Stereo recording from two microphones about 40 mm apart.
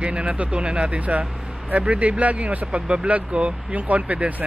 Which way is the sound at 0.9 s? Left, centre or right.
Right.